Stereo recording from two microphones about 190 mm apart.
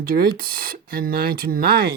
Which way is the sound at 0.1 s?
50° right (ahead or behind).